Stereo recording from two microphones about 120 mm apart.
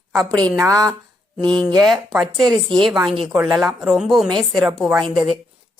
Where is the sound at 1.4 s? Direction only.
10° left (ahead or behind).